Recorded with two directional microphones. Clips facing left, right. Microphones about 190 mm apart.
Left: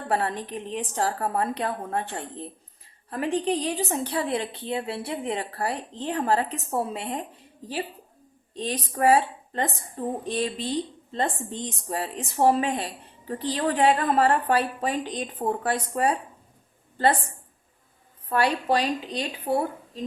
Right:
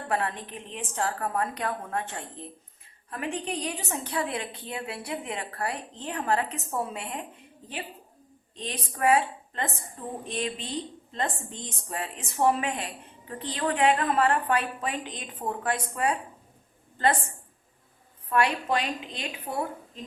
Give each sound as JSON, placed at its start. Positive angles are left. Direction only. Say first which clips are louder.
{"t": 0.1, "sound": "a woman's voice", "louder": "left 3 dB", "side_deg": 35}
{"t": 8.5, "sound": "a woman's voice", "louder": "left 7 dB", "side_deg": 35}
{"t": 18.3, "sound": "a woman's voice", "louder": "left 2 dB", "side_deg": 35}